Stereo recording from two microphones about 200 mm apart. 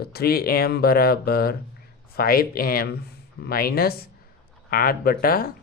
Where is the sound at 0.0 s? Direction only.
50° left (ahead or behind).